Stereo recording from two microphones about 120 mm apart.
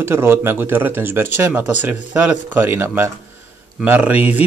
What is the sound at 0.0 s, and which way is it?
Speech, 20° right (ahead or behind).